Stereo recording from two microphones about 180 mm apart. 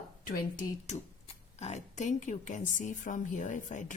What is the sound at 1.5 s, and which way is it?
A woman's voice, 35° left (ahead or behind).